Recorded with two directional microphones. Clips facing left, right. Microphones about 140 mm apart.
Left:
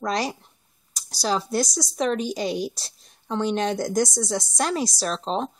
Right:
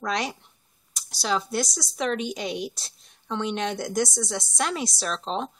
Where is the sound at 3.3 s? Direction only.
35° left (ahead or behind).